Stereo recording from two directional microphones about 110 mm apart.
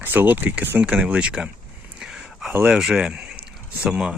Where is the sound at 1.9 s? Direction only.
5° right (ahead or behind).